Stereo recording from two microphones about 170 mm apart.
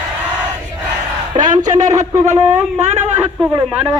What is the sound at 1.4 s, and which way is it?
Speech, 45° right (ahead or behind).